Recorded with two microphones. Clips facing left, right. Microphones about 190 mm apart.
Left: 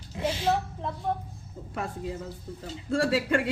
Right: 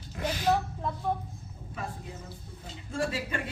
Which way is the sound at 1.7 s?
80° left.